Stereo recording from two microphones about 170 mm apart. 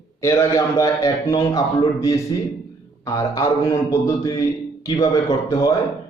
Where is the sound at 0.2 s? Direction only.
20° left (ahead or behind).